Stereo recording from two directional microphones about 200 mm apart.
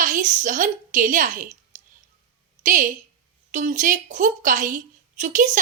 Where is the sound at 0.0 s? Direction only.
40° right (ahead or behind).